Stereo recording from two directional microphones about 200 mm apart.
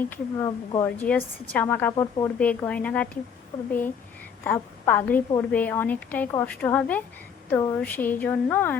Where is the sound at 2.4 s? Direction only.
5° left (ahead or behind).